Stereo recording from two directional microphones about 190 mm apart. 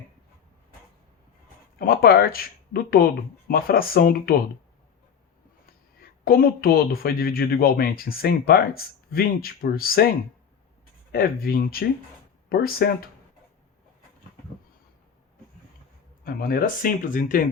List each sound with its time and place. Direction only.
1.8 s speech: 50° left (ahead or behind)
6.2 s speech: 50° left (ahead or behind)
11.1 s speech: 50° left (ahead or behind)
16.2 s speech: 50° left (ahead or behind)